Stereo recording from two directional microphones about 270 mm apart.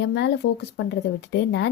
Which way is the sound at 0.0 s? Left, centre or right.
Left.